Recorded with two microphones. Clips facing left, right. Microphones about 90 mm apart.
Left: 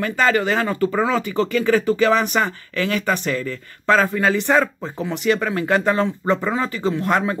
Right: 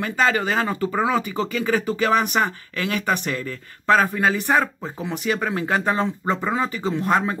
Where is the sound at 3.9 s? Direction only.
20° right (ahead or behind).